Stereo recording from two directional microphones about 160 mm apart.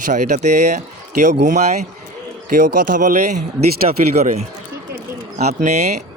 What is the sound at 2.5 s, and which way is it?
Speech, 55° right (ahead or behind).